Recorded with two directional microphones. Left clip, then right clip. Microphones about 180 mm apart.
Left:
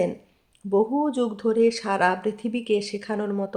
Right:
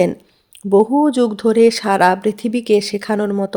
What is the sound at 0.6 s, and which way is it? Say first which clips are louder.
Speech: right 9 dB; 40° right (ahead or behind).